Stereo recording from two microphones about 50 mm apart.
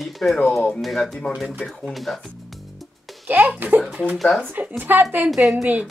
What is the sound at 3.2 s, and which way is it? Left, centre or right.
Speech, right.